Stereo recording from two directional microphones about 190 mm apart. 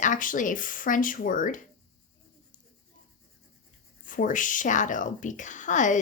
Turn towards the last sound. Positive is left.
turn(degrees=40)  # may be behind; listen again after turning